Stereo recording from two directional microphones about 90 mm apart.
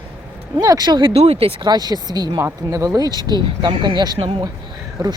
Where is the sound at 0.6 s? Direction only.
45° right (ahead or behind); by 1.7 s 80° right.